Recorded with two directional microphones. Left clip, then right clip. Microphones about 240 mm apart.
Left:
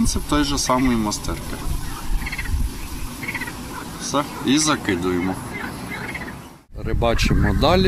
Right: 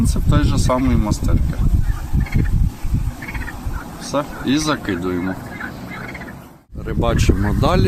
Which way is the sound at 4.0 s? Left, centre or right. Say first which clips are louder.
Right 1 dB; centre.